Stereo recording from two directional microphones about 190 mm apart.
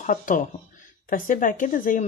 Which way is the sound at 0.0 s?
45° left (ahead or behind).